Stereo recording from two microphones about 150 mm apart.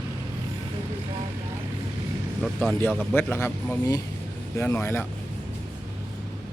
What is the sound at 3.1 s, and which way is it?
Speech, 15° left (ahead or behind).